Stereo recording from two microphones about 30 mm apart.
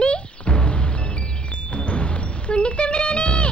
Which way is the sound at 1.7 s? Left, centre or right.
Left.